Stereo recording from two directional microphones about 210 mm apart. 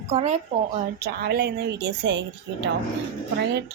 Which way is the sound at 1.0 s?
50° right (ahead or behind).